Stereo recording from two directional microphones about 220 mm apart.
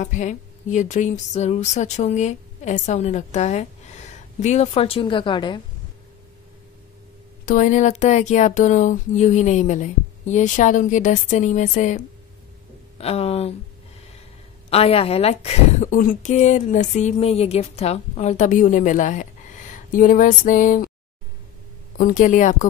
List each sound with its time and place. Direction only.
0.0 s a woman's voice: 35° left (ahead or behind)
7.4 s a woman's voice: 35° left (ahead or behind)
14.7 s speech: 25° left (ahead or behind)
19.7 s a sound: 35° left (ahead or behind)
21.9 s speech: 35° left (ahead or behind)